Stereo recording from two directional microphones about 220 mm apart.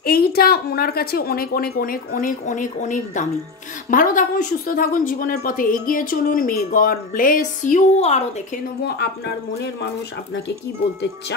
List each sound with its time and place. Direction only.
0.0 s a woman's voice: 45° left (ahead or behind)